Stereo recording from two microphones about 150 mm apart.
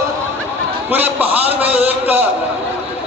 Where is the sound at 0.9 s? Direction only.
10° right (ahead or behind).